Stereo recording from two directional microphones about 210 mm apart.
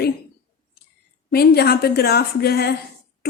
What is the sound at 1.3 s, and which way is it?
A woman's voice, 50° left (ahead or behind).